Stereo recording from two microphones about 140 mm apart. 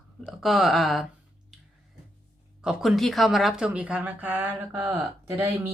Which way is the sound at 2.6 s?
5° right (ahead or behind).